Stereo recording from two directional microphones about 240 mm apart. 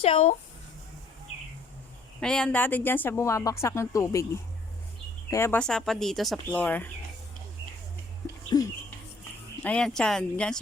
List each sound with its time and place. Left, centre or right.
0.0 s speech: left
2.2 s a woman's voice: centre
5.3 s speech: centre
8.4 s bird: centre
9.6 s speech: centre